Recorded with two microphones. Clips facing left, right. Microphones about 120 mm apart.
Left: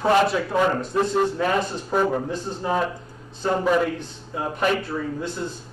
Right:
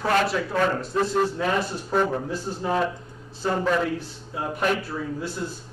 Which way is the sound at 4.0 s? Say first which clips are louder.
Left 2 dB; 5° right (ahead or behind).